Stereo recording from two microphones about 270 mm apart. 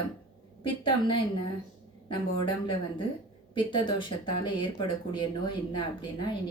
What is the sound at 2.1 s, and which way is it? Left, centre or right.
Speech, centre.